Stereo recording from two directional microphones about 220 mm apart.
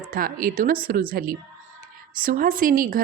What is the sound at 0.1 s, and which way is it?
A woman's voice, 40° right (ahead or behind).